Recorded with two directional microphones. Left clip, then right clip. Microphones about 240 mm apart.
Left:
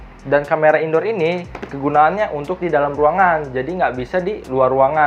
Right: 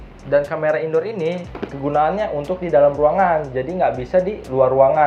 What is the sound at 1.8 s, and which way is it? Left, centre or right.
Speech, left.